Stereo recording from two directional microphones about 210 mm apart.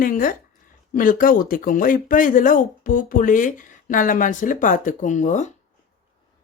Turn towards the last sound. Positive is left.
turn(degrees=35)  # may be behind; listen again after turning